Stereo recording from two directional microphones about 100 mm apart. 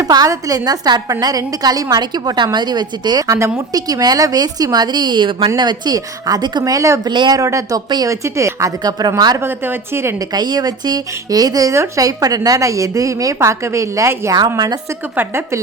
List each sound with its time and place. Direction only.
0.0 s a woman's voice: 35° right (ahead or behind)
3.2 s a woman's voice: 25° right (ahead or behind)
3.7 s speech: 40° right (ahead or behind)
7.1 s a woman's voice: 45° right (ahead or behind)
7.4 s speech: 35° right (ahead or behind)
7.9 s a woman's voice: 45° right (ahead or behind)
8.1 s a woman's voice: 30° right (ahead or behind)
8.8 s speech: 40° right (ahead or behind)
9.4 s a woman's voice: 25° right (ahead or behind)
10.2 s speech: 45° right (ahead or behind); by 14.3 s 25° right (ahead or behind)
14.3 s a woman's voice: 40° right (ahead or behind)
15.1 s a woman's voice: 20° right (ahead or behind)